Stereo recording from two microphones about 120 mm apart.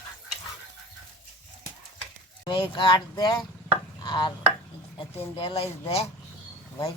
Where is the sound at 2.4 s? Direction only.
40° left (ahead or behind).